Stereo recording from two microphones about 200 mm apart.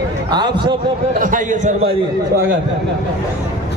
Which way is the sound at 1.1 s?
40° right (ahead or behind).